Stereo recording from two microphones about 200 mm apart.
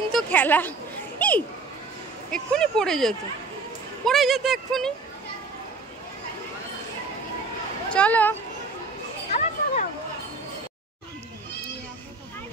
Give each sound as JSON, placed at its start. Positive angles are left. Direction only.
{"t": 0.1, "sound": "a woman's voice", "side_deg": 10}
{"t": 1.2, "sound": "children playing", "side_deg": 5}
{"t": 2.3, "sound": "speech", "side_deg": 5}
{"t": 7.9, "sound": "a woman's voice", "side_deg": 5}
{"t": 9.3, "sound": "children playing", "side_deg": 35}